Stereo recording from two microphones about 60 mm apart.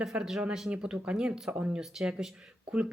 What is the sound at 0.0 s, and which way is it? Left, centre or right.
Speech, centre.